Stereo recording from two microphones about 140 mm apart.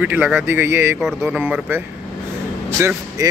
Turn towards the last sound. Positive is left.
turn(degrees=-20)  # may be behind; listen again after turning